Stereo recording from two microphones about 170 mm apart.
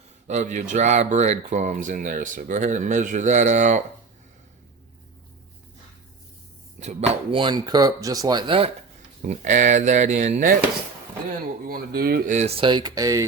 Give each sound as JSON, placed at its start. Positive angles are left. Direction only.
{"t": 0.3, "sound": "speech", "side_deg": -45}
{"t": 6.7, "sound": "speech", "side_deg": -40}
{"t": 9.2, "sound": "speech", "side_deg": -45}
{"t": 11.6, "sound": "speech", "side_deg": -60}
{"t": 12.3, "sound": "speech", "side_deg": -40}